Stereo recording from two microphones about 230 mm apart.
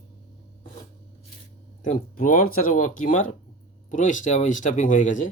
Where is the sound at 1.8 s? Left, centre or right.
Left.